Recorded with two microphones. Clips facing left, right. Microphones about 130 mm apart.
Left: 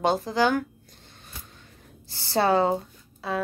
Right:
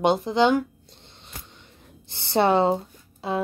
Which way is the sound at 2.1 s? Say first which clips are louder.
Right 2 dB; 20° right (ahead or behind).